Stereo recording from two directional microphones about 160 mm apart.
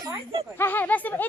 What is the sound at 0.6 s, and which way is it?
Speech, 10° left (ahead or behind).